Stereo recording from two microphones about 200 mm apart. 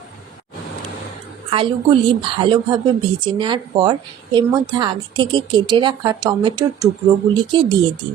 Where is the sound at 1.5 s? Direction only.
25° right (ahead or behind).